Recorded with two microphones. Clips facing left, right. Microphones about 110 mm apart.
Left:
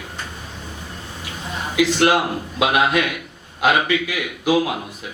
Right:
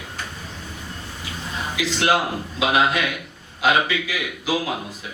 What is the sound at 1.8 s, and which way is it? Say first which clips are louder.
A man's voice: left 5 dB; 55° left (ahead or behind).